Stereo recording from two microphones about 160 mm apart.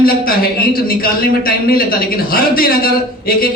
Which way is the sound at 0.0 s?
65° left (ahead or behind).